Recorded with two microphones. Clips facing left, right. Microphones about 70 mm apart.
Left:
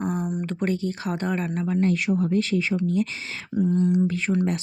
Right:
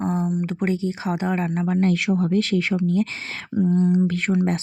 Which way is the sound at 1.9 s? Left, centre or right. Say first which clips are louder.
Right 2 dB; right.